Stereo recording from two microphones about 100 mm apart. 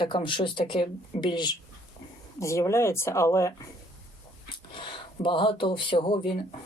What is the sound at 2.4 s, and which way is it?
Speech, 30° left (ahead or behind).